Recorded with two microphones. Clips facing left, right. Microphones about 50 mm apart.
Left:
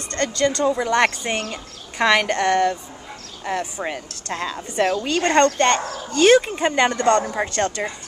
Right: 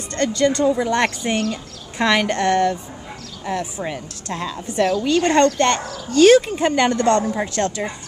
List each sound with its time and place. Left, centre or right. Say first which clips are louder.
0.1 s speech: right 2 dB; centre
1.0 s speech: right 1 dB; left
2.0 s a woman's voice: even; centre
4.7 s speech: right 3 dB; left
6.1 s speech: right 3 dB; centre; by 7.3 s left
7.6 s speech: even; centre